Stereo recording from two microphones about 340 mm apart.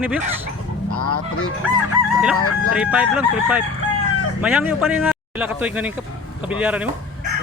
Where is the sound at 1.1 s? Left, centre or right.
Left.